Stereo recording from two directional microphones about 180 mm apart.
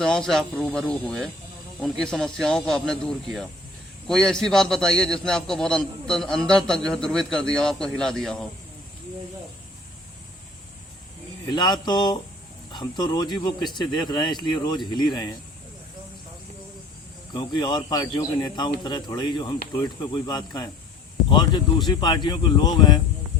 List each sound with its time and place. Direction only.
0.0 s a man's voice: 5° left (ahead or behind)
11.4 s speech: 25° left (ahead or behind)
17.3 s speech: 25° left (ahead or behind)
21.8 s speech: 25° left (ahead or behind)